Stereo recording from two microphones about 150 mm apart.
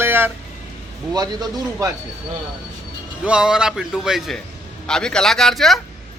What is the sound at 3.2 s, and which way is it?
Speech, 5° right (ahead or behind).